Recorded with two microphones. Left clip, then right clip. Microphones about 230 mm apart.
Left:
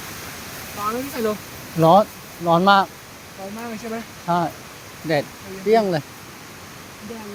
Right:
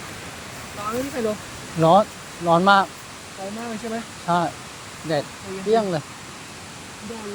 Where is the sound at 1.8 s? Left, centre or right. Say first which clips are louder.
Left 2 dB; left.